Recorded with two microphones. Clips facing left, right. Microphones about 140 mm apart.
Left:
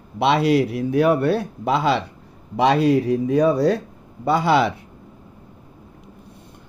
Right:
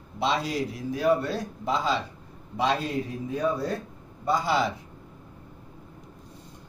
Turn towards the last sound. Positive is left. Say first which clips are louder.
# left 7 dB
turn(degrees=70)  # may be behind; listen again after turning